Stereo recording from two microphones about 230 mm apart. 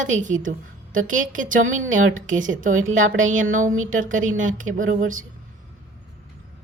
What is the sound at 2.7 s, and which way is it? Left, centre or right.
Speech, right.